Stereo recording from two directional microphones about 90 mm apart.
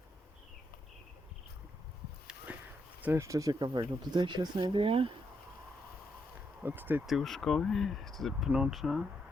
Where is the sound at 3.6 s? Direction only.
60° right (ahead or behind); by 5.1 s 85° right.